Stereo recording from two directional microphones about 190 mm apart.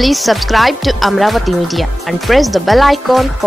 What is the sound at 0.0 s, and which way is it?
A woman's voice, centre (ahead or behind).